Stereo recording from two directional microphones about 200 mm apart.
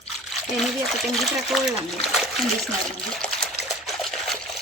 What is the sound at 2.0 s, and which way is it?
Splash, centre (ahead or behind).